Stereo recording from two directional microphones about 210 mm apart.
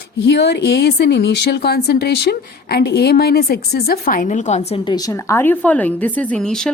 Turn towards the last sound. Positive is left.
turn(degrees=5)  # may be behind; listen again after turning